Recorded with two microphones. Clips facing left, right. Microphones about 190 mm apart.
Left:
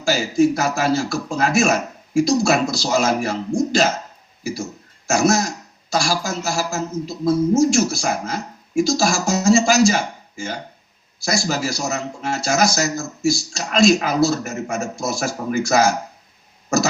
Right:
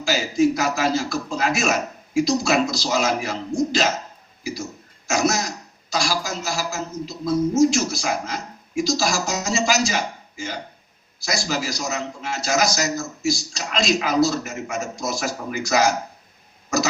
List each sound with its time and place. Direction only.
0.0 s speech: 50° left (ahead or behind)
5.0 s speech: 50° left (ahead or behind)